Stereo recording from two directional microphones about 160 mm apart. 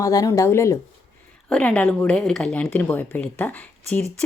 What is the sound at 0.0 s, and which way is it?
Speech, 20° left (ahead or behind).